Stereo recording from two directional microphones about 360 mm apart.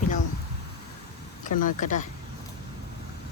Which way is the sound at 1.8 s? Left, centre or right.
Left.